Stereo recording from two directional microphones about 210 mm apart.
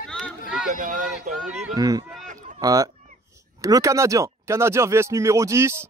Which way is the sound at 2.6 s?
15° right (ahead or behind).